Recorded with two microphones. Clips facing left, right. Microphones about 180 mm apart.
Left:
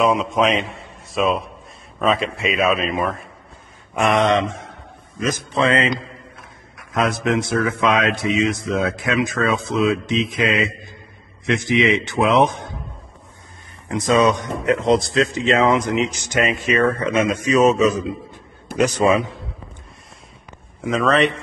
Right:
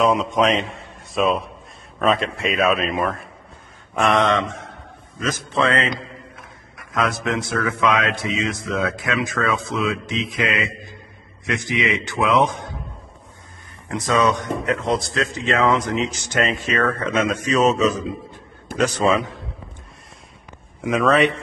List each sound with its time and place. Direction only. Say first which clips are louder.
0.0 s a man's voice: even; centre (ahead or behind)
4.1 s speech: left 2 dB; 20° left (ahead or behind)
6.9 s speech: left 3 dB; 25° left (ahead or behind)
13.8 s speech: left 3 dB; 20° left (ahead or behind)
20.9 s speech: even; 10° right (ahead or behind)